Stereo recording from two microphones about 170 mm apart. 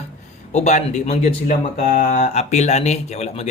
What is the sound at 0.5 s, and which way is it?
Speech, 45° left (ahead or behind).